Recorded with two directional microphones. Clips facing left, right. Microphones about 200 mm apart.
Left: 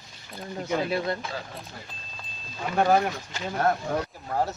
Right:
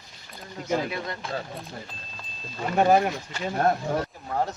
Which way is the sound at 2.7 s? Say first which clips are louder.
Right 2 dB; 15° right (ahead or behind).